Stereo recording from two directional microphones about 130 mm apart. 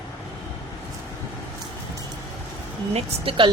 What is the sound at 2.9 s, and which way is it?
Speech, 40° right (ahead or behind).